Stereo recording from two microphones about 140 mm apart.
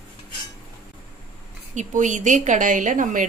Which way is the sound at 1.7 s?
60° right (ahead or behind).